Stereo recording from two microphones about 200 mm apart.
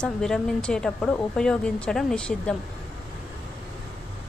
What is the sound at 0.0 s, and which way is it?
A woman's voice, 5° left (ahead or behind).